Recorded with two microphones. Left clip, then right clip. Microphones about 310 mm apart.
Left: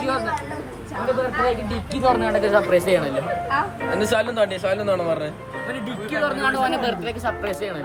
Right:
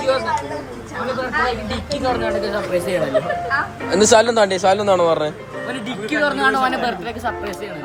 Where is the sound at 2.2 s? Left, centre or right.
Left.